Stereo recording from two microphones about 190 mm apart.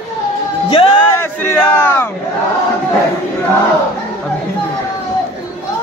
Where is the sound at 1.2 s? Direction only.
10° left (ahead or behind).